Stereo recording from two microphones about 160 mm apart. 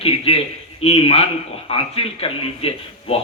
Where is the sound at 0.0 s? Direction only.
40° left (ahead or behind).